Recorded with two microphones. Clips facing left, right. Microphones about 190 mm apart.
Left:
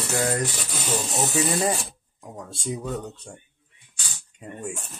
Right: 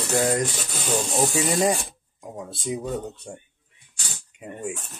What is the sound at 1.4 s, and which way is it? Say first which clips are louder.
Music: right 3 dB; 15° right (ahead or behind).